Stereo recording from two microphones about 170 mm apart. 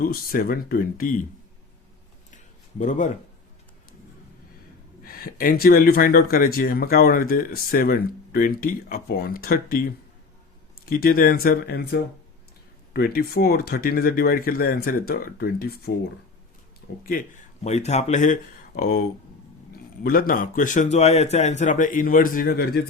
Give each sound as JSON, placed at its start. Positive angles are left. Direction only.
{"t": 0.0, "sound": "speech", "side_deg": 60}
{"t": 2.3, "sound": "a sound", "side_deg": 45}
{"t": 5.0, "sound": "speech", "side_deg": 60}
{"t": 10.8, "sound": "speech", "side_deg": 60}
{"t": 17.1, "sound": "speech", "side_deg": 50}
{"t": 20.1, "sound": "a man's voice", "side_deg": 60}